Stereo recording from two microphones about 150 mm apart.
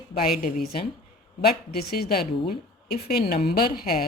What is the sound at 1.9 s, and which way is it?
Speech, 90° left.